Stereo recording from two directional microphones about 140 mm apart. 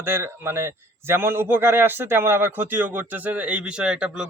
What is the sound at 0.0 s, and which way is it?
Speech, 15° right (ahead or behind).